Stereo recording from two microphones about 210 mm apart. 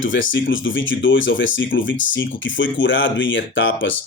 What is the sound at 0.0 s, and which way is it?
Speech, 65° left (ahead or behind).